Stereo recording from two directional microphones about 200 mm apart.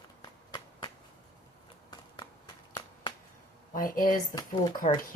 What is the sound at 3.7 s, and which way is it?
Speech, 45° left (ahead or behind).